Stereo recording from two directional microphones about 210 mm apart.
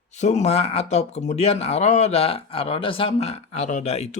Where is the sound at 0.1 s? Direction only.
35° left (ahead or behind).